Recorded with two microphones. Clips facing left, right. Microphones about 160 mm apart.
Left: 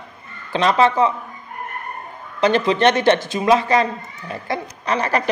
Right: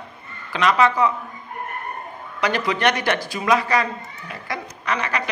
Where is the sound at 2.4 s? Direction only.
25° left (ahead or behind).